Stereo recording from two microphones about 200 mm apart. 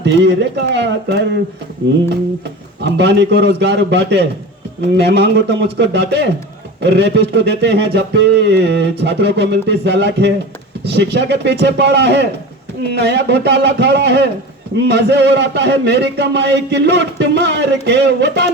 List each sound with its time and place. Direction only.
0.0 s speech: 60° right (ahead or behind)
2.8 s speech: 60° right (ahead or behind)